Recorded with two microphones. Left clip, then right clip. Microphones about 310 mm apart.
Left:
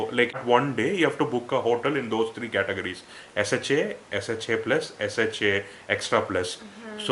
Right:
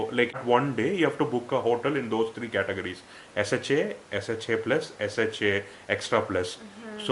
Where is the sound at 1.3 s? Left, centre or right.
Right.